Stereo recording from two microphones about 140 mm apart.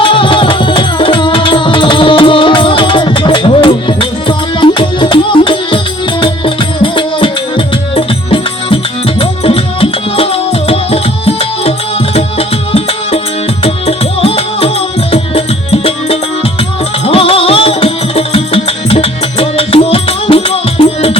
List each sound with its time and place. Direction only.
0.0 s music: 40° left (ahead or behind)